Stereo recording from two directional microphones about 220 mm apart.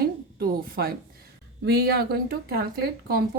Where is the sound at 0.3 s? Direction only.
45° right (ahead or behind).